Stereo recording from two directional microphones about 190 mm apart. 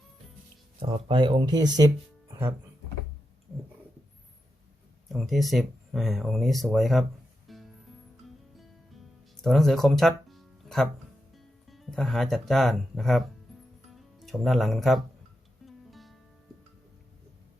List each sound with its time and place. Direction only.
0.8 s speech: 25° right (ahead or behind)
5.1 s speech: centre (ahead or behind)
7.4 s music: centre (ahead or behind)
9.4 s speech: centre (ahead or behind)
15.6 s music: centre (ahead or behind)